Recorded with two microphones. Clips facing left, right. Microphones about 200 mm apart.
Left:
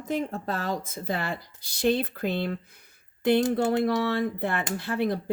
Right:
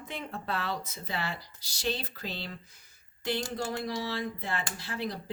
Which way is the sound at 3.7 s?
60° left (ahead or behind).